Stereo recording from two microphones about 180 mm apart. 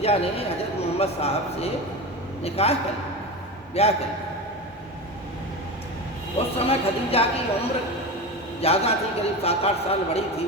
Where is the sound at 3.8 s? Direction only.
35° left (ahead or behind).